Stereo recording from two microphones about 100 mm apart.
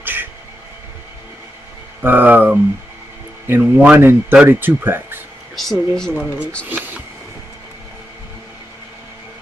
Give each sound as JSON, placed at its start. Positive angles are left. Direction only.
{"t": 0.0, "sound": "a sound", "side_deg": -20}
{"t": 2.0, "sound": "speech", "side_deg": -20}
{"t": 3.6, "sound": "speech", "side_deg": -15}
{"t": 5.6, "sound": "speech", "side_deg": 5}
{"t": 6.1, "sound": "speech", "side_deg": -15}
{"t": 6.7, "sound": "a sound", "side_deg": -15}